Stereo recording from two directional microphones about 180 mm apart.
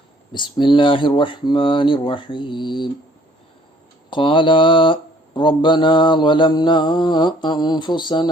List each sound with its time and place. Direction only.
0.3 s speech: 25° left (ahead or behind)
4.1 s speech: 25° left (ahead or behind)